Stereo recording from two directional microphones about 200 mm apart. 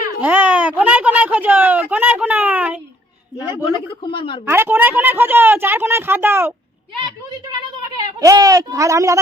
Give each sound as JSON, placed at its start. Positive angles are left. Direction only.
{"t": 0.2, "sound": "a sound", "side_deg": -10}
{"t": 3.7, "sound": "speech", "side_deg": 25}
{"t": 4.4, "sound": "a woman's voice", "side_deg": -10}
{"t": 7.9, "sound": "speech", "side_deg": -15}